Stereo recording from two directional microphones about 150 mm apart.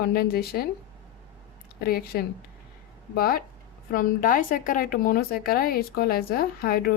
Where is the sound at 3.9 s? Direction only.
70° left (ahead or behind).